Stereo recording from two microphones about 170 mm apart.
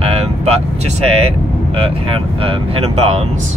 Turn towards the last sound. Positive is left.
turn(degrees=-35)  # may be behind; listen again after turning